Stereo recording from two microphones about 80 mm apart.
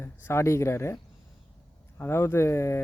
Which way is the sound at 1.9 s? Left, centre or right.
Left.